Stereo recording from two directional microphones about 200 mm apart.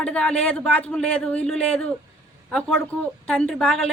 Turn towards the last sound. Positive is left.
turn(degrees=5)  # may be behind; listen again after turning